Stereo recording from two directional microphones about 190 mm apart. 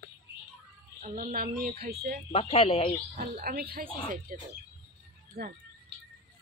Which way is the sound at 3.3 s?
50° right (ahead or behind).